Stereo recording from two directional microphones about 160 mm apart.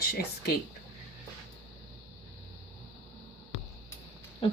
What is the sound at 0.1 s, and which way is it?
Speech, 85° left.